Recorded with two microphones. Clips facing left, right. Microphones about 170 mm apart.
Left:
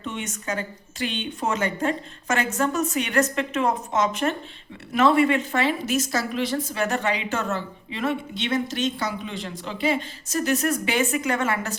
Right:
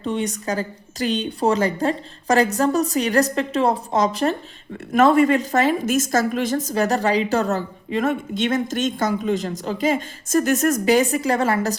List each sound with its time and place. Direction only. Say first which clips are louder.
0.0 s a woman's voice: right 8 dB; 35° right (ahead or behind)